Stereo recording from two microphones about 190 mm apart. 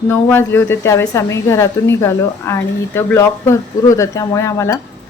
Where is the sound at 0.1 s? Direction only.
10° left (ahead or behind).